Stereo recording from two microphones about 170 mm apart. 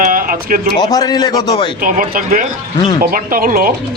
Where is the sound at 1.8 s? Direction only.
55° right (ahead or behind).